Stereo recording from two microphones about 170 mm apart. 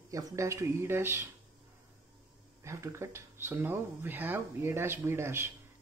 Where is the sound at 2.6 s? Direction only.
15° right (ahead or behind).